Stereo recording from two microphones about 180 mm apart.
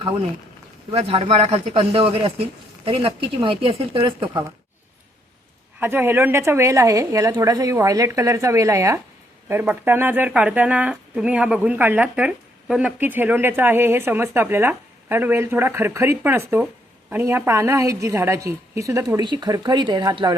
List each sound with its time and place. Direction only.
0.9 s a man's voice: 30° right (ahead or behind)
5.8 s speech: 10° right (ahead or behind)